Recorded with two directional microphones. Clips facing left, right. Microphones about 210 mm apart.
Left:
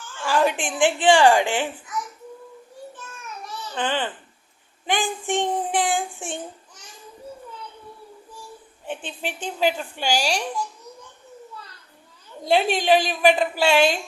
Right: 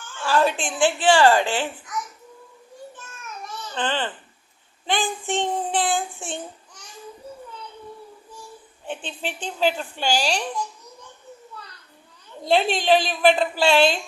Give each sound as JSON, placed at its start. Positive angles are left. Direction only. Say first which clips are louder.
{"t": 0.3, "sound": "a woman's voice", "louder": "even", "side_deg": 15}
{"t": 3.8, "sound": "a woman's voice", "louder": "left 1 dB", "side_deg": 15}
{"t": 9.0, "sound": "a woman's voice", "louder": "left 1 dB", "side_deg": 10}
{"t": 12.4, "sound": "a woman's voice", "louder": "even", "side_deg": 10}